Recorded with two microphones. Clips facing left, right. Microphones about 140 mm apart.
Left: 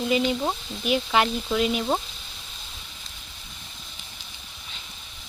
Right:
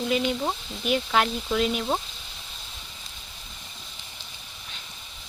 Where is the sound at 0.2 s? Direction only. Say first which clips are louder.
Left 2 dB; centre (ahead or behind).